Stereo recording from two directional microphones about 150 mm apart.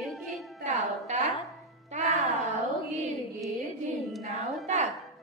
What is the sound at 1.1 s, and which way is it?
Music, 50° right (ahead or behind).